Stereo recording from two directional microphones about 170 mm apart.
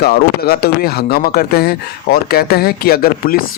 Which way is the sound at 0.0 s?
70° left (ahead or behind).